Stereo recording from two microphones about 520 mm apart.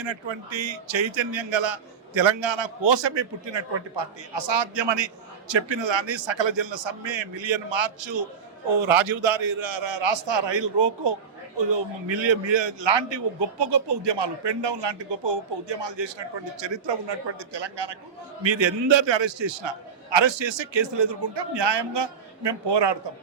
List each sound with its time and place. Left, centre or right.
0.0 s a man's voice: right